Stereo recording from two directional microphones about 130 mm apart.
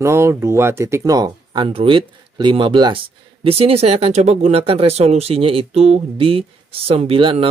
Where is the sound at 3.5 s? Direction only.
50° right (ahead or behind).